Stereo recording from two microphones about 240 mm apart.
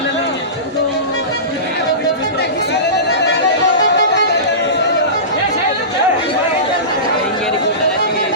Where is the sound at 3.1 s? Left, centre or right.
Left.